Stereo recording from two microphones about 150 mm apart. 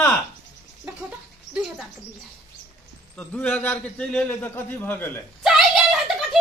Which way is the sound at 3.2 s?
10° left (ahead or behind).